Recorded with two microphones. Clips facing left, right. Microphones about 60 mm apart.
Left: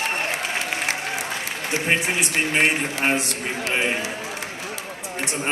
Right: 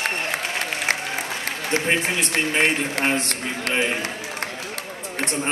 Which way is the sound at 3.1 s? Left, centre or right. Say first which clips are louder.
Even; right.